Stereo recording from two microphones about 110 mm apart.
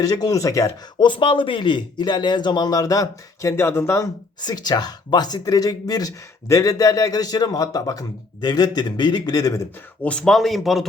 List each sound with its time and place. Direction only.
0.0 s speech: 35° left (ahead or behind)
0.9 s speech: 45° left (ahead or behind); by 4.1 s 25° left (ahead or behind)
4.4 s speech: 40° left (ahead or behind)
10.0 s speech: 10° left (ahead or behind)